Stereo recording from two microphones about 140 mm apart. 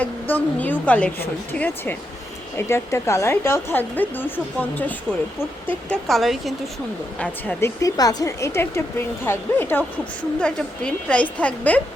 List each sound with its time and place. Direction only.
0.0 s speech: 10° left (ahead or behind)
7.2 s speech: 15° left (ahead or behind)